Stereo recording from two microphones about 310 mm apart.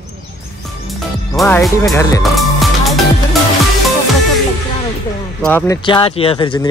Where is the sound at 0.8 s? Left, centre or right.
Centre.